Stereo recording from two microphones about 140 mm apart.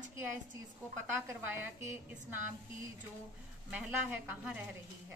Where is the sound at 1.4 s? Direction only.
15° right (ahead or behind).